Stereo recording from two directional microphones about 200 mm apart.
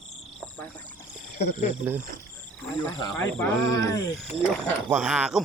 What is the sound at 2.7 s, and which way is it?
Speech, 20° left (ahead or behind).